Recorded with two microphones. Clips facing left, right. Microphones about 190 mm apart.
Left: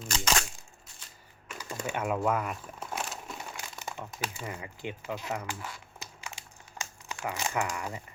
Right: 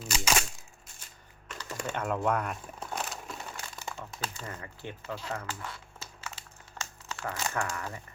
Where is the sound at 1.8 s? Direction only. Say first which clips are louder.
Left 1 dB; 10° left (ahead or behind).